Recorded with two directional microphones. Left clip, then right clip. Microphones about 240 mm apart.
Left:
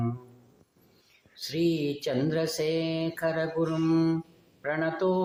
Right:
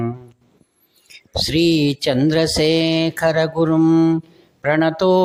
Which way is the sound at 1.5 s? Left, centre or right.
Right.